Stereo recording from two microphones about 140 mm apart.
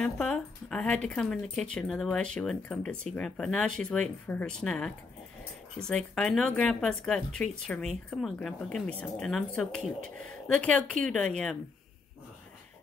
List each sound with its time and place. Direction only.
0.0 s speech: 5° left (ahead or behind)